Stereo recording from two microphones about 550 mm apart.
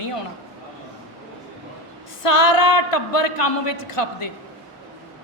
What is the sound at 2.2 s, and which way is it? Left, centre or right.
A woman's voice, left.